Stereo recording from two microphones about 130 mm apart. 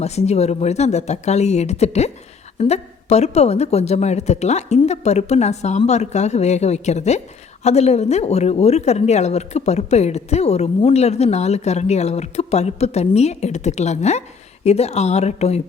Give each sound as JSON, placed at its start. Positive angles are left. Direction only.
{"t": 0.0, "sound": "speech", "side_deg": 55}